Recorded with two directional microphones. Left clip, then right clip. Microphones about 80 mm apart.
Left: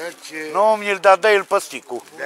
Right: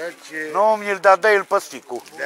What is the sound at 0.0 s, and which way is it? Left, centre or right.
Speech, left.